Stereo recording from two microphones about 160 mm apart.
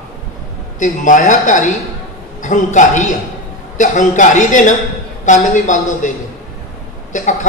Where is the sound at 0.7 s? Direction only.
50° left (ahead or behind).